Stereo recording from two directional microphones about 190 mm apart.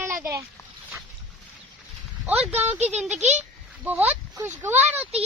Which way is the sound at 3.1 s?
35° right (ahead or behind).